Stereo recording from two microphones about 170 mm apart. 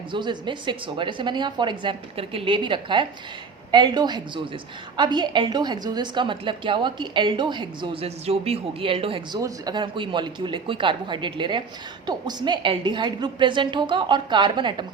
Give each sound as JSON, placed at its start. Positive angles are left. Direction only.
{"t": 0.1, "sound": "a woman's voice", "side_deg": -25}